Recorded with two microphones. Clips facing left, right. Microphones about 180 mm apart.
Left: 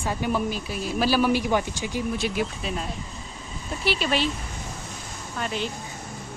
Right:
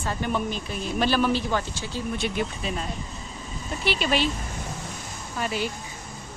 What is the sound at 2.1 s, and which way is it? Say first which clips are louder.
Speech: right 1 dB; 5° left (ahead or behind).